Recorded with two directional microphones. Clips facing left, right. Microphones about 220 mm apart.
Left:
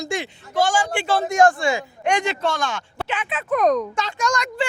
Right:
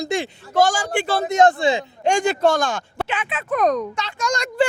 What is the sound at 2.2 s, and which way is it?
Speech, 45° right (ahead or behind).